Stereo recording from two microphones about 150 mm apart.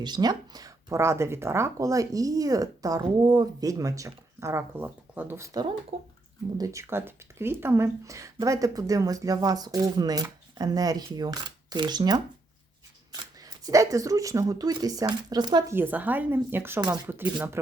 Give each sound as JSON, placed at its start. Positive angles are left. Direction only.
{"t": 0.0, "sound": "speech", "side_deg": -25}
{"t": 5.9, "sound": "speech", "side_deg": -45}
{"t": 6.6, "sound": "speech", "side_deg": -20}
{"t": 13.4, "sound": "speech", "side_deg": -25}
{"t": 15.7, "sound": "speech", "side_deg": -15}